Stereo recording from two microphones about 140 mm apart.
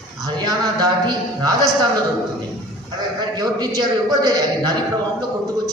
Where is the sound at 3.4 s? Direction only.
30° right (ahead or behind).